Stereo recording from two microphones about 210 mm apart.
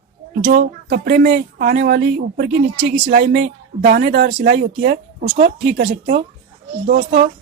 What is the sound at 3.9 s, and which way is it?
Speech, 45° right (ahead or behind).